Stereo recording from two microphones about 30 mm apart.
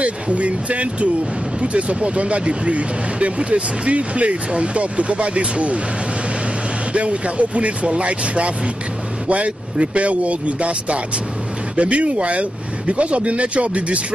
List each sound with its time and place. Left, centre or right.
0.0 s speech: right
6.9 s speech: right